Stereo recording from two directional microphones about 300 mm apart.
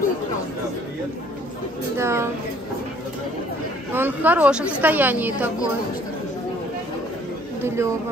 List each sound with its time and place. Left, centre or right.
2.0 s speech: centre
3.9 s a woman's voice: centre
7.6 s speech: centre